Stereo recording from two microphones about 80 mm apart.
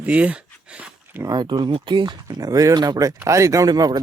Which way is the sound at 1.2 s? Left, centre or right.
Right.